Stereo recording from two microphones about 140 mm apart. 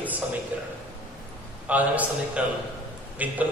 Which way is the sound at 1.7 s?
10° right (ahead or behind).